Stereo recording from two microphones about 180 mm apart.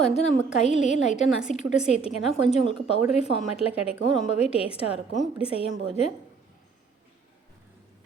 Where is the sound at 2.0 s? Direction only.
35° left (ahead or behind).